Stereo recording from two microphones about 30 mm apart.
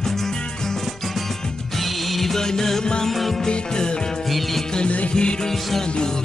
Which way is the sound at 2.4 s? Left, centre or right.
Centre.